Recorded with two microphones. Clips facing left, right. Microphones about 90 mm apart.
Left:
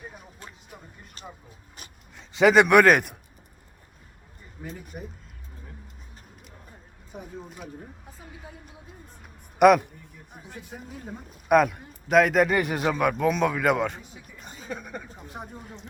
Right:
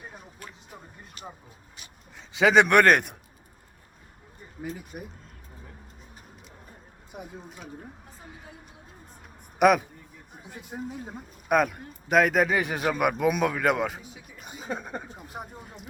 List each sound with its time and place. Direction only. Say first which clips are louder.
1.2 s vehicle: right 1 dB; 35° left (ahead or behind)
2.1 s a man's voice: left 2 dB; centre (ahead or behind)
4.9 s speech: left 1 dB; 10° right (ahead or behind)
9.6 s a man's voice: left 3 dB; centre (ahead or behind)
10.5 s speech: right 5 dB; 20° right (ahead or behind)
11.4 s speech: left 4 dB; centre (ahead or behind)
14.6 s speech: right 2 dB; 30° right (ahead or behind)
15.3 s speech: left 2 dB; 5° right (ahead or behind)